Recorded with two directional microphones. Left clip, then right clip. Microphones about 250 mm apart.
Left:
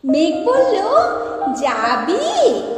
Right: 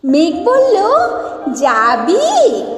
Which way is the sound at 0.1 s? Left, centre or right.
Right.